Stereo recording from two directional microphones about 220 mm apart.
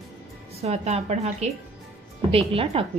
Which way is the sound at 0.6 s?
30° right (ahead or behind).